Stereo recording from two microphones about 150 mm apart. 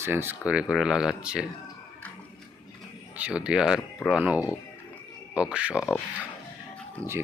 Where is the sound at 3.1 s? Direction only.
5° right (ahead or behind).